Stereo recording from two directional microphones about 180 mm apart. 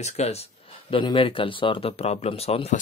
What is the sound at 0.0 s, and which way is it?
Speech, 40° left (ahead or behind).